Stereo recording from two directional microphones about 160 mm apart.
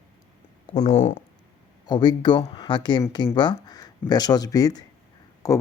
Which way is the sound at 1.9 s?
25° left (ahead or behind).